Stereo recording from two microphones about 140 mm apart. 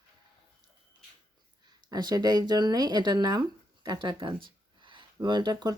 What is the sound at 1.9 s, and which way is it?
Speech, 30° right (ahead or behind).